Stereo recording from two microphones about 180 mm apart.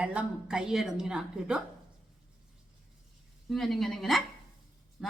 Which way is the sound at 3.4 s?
Centre (ahead or behind).